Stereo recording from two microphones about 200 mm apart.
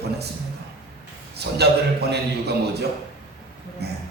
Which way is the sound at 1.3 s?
55° right (ahead or behind).